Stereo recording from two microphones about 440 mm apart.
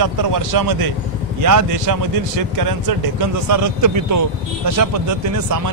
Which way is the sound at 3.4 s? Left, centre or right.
Right.